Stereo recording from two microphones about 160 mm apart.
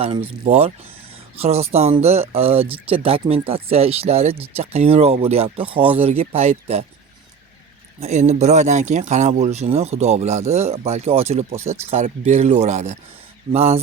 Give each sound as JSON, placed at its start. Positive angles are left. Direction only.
{"t": 0.4, "sound": "speech", "side_deg": -40}
{"t": 7.9, "sound": "speech", "side_deg": -45}